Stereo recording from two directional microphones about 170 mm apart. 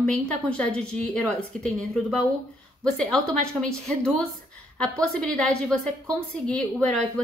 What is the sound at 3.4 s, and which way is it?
A woman's voice, 5° left (ahead or behind).